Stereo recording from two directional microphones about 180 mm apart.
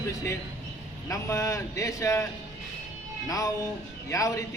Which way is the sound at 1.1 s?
20° left (ahead or behind).